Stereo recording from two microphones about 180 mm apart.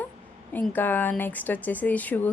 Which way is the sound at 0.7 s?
10° left (ahead or behind).